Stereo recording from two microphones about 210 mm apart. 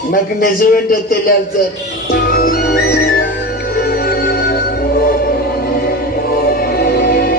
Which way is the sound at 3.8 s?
45° left (ahead or behind).